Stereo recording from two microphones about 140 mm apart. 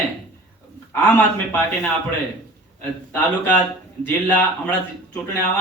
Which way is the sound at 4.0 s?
15° left (ahead or behind).